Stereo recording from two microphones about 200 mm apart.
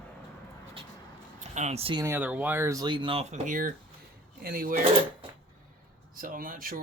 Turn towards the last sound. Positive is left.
turn(degrees=-45)  # may be behind; listen again after turning